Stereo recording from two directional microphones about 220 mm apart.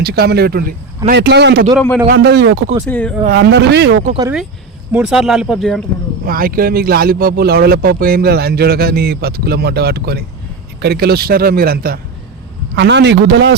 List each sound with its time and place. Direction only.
0.0 s speech: 45° right (ahead or behind)
2.8 s speech: 5° left (ahead or behind)
3.2 s speech: 50° right (ahead or behind)
4.9 s speech: 5° right (ahead or behind)
6.2 s speech: 40° right (ahead or behind)